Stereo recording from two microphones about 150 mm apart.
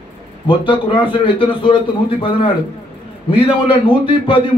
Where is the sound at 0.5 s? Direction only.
35° left (ahead or behind).